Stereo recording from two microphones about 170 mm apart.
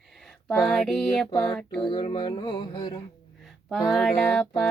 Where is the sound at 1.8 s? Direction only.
30° left (ahead or behind).